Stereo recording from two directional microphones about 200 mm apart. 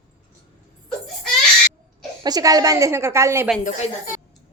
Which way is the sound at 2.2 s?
20° right (ahead or behind).